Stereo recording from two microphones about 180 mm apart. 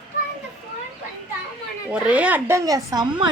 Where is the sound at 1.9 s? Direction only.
5° right (ahead or behind).